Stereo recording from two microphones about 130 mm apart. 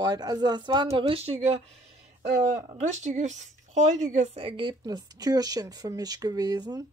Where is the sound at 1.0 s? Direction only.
45° right (ahead or behind).